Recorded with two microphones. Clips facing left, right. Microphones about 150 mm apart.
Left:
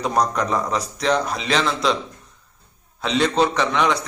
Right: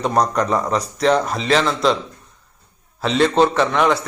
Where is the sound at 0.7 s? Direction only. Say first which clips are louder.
Right 4 dB; centre (ahead or behind).